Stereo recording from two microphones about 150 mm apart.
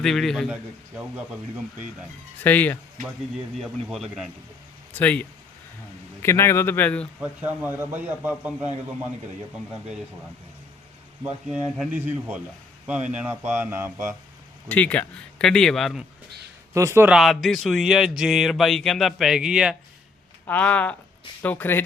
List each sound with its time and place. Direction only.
0.0 s speech: 5° left (ahead or behind)
0.5 s a man's voice: 10° right (ahead or behind)
2.4 s speech: 10° left (ahead or behind)
3.6 s speech: centre (ahead or behind)
4.9 s speech: 10° left (ahead or behind)
6.2 s speech: 15° left (ahead or behind)
7.2 s a man's voice: 10° right (ahead or behind)
11.2 s a man's voice: 10° right (ahead or behind)
14.7 s speech: 10° left (ahead or behind)
16.7 s speech: 20° right (ahead or behind)
17.1 s speech: centre (ahead or behind)
20.5 s speech: 10° left (ahead or behind)